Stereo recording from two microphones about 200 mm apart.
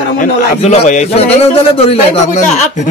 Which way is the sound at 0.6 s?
30° left (ahead or behind).